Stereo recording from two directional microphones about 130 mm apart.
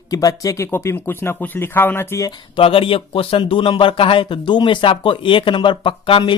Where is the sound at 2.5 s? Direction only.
45° left (ahead or behind).